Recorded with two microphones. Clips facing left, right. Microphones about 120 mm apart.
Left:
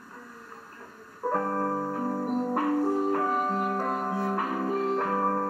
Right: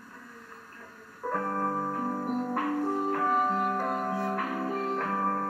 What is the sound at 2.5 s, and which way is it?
Music, 25° left (ahead or behind).